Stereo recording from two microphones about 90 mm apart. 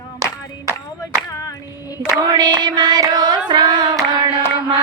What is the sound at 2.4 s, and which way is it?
Music, 55° right (ahead or behind).